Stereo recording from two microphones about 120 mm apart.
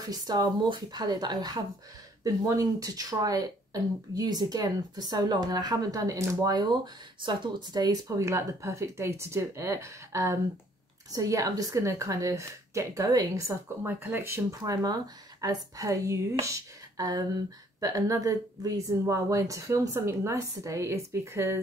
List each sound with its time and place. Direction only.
0.0 s a woman's voice: 35° right (ahead or behind)
13.8 s a woman's voice: 15° right (ahead or behind)
14.6 s a woman's voice: 35° right (ahead or behind)